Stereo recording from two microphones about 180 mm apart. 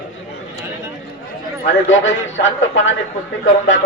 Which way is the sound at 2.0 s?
90° left.